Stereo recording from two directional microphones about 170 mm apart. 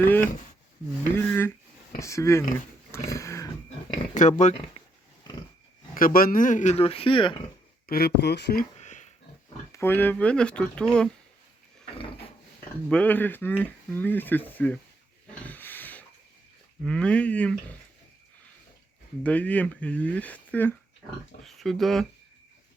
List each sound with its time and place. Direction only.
0.2 s speech: 50° left (ahead or behind)
1.1 s a sound: 15° left (ahead or behind)
2.0 s speech: 20° left (ahead or behind)
3.1 s a sound: 15° left (ahead or behind)
4.1 s speech: 45° left (ahead or behind)
5.9 s speech: 55° left (ahead or behind); by 7.4 s 30° left (ahead or behind)
7.9 s speech: 65° left (ahead or behind)
8.8 s a sound: 45° left (ahead or behind)
9.7 s speech: 15° left (ahead or behind)
12.9 s speech: 10° left (ahead or behind)
15.3 s a sound: 10° left (ahead or behind)
16.8 s speech: 5° left (ahead or behind)
19.2 s speech: 10° left (ahead or behind)